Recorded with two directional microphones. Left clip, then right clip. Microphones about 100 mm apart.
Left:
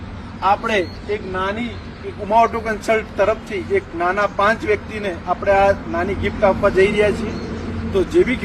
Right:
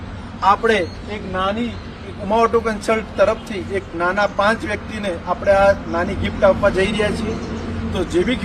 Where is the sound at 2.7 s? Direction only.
30° right (ahead or behind).